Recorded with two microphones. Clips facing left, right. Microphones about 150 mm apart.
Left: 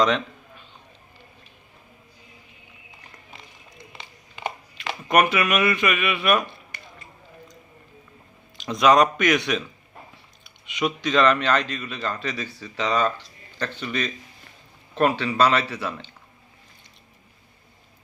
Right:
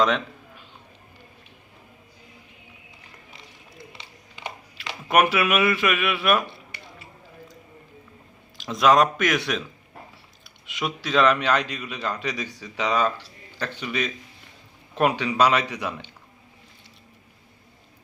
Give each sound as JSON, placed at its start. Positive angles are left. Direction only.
{"t": 3.9, "sound": "music", "side_deg": 50}
{"t": 5.0, "sound": "speech", "side_deg": -5}
{"t": 8.5, "sound": "speech", "side_deg": 0}
{"t": 10.7, "sound": "a man's voice", "side_deg": 0}